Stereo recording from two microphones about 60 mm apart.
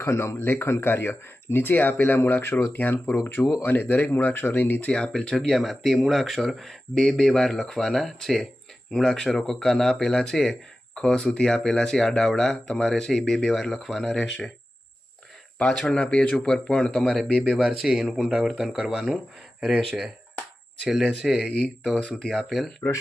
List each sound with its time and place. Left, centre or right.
0.0 s a man's voice: left
5.1 s speech: centre
15.5 s speech: centre
17.6 s speech: centre
21.4 s speech: centre
22.3 s speech: centre